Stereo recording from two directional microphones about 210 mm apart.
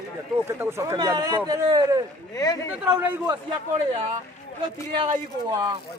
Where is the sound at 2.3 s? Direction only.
15° left (ahead or behind).